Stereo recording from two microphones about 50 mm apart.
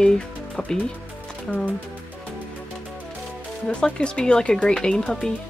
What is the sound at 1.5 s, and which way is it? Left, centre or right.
Speech, left.